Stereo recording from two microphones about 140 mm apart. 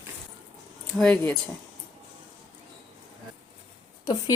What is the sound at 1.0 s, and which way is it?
Speech, 10° left (ahead or behind).